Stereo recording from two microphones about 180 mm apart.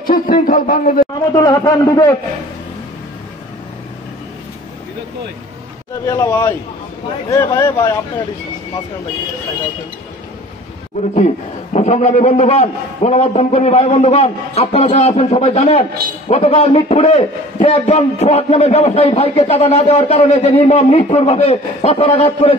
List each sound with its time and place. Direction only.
0.0 s a man's voice: 50° left (ahead or behind)
1.3 s a man's voice: 20° left (ahead or behind)
6.0 s speech: 15° left (ahead or behind)
11.1 s a man's voice: 40° left (ahead or behind)